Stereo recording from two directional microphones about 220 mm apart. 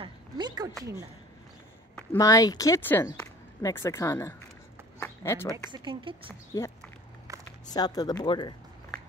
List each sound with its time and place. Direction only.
0.0 s a sound: 20° right (ahead or behind)
2.1 s speech: 15° left (ahead or behind)
5.7 s speech: 20° right (ahead or behind)
6.5 s speech: 15° left (ahead or behind)
7.3 s a sound: 15° right (ahead or behind)
7.7 s speech: 20° left (ahead or behind)